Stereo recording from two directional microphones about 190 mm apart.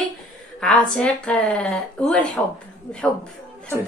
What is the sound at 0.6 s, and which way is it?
A woman's voice, 5° left (ahead or behind).